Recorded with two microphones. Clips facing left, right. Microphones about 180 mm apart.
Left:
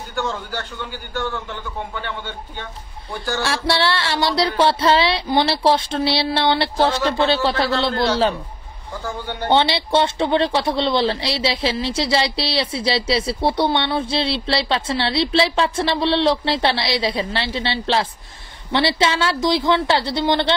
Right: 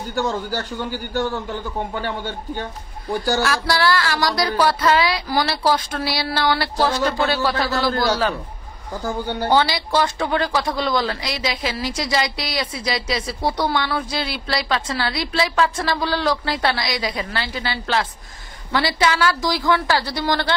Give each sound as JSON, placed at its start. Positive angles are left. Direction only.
{"t": 0.1, "sound": "a man's voice", "side_deg": -40}
{"t": 3.4, "sound": "a woman's voice", "side_deg": 25}
{"t": 9.0, "sound": "a man's voice", "side_deg": -35}
{"t": 9.5, "sound": "a woman's voice", "side_deg": 25}